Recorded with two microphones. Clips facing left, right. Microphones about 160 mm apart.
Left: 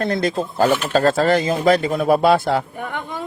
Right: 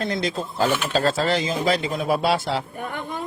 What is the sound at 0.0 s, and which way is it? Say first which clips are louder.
Speech: left 5 dB; 55° left (ahead or behind).